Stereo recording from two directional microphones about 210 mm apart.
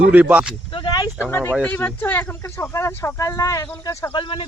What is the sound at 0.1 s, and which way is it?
Speech, 5° right (ahead or behind).